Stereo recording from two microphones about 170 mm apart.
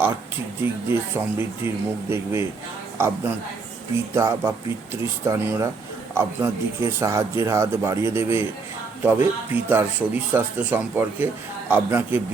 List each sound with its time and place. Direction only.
0.6 s speech: 10° right (ahead or behind)
4.1 s speech: 15° right (ahead or behind)